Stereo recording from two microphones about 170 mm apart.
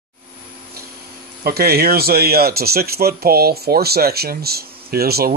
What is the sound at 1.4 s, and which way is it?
Speech, 65° right (ahead or behind).